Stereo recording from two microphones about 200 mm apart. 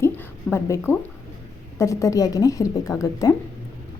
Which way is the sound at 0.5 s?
10° left (ahead or behind).